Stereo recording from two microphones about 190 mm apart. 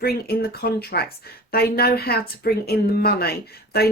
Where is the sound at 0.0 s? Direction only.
55° left (ahead or behind).